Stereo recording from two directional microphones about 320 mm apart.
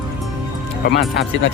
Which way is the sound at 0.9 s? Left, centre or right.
Left.